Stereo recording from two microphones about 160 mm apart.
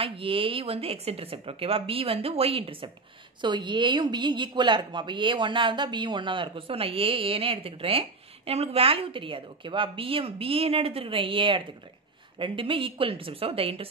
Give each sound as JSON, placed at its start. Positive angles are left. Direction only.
{"t": 0.0, "sound": "a woman's voice", "side_deg": -35}